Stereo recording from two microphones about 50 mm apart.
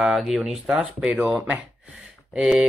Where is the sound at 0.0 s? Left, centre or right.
Centre.